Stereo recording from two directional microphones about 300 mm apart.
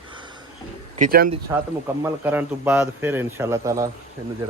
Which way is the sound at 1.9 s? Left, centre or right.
Centre.